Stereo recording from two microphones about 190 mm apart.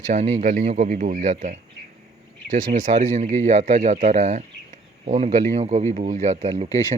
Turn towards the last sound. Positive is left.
turn(degrees=-35)  # may be behind; listen again after turning